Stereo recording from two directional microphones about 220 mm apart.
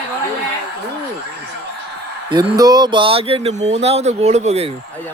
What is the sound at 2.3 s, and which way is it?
Speech, 20° right (ahead or behind).